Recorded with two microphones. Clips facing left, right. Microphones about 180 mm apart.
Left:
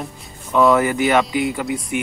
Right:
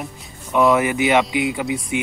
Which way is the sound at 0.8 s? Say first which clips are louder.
Left 1 dB; 20° right (ahead or behind).